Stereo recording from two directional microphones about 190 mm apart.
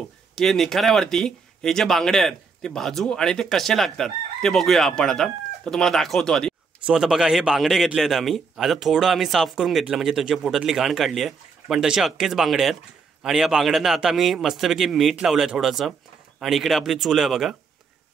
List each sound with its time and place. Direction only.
0.4 s speech: centre (ahead or behind)